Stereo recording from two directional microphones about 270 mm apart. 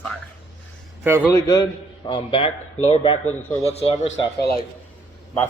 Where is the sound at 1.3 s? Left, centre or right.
Centre.